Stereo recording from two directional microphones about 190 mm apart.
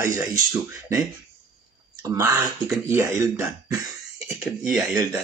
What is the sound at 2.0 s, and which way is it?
Speech, 15° right (ahead or behind).